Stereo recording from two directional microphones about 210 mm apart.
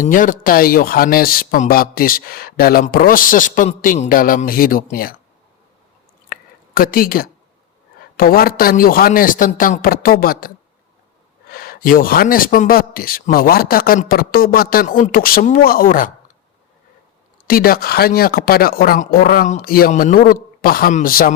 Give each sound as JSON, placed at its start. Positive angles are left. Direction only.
{"t": 0.0, "sound": "speech", "side_deg": 40}
{"t": 6.2, "sound": "a sound", "side_deg": 45}
{"t": 8.1, "sound": "speech", "side_deg": 45}
{"t": 17.4, "sound": "speech", "side_deg": 45}